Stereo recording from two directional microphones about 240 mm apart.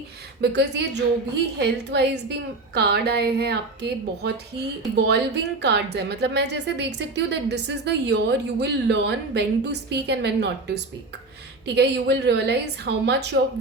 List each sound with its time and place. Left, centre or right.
0.5 s a woman's voice: right
11.6 s a woman's voice: right